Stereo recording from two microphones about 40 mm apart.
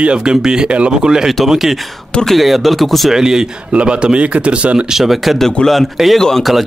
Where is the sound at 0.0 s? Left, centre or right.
Right.